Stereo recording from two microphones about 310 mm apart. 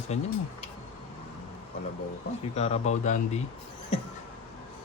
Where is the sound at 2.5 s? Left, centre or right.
Left.